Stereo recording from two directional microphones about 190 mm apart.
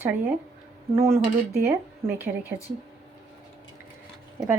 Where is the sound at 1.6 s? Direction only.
10° right (ahead or behind).